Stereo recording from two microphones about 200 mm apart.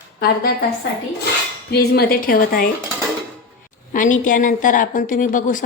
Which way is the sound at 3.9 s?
40° left (ahead or behind).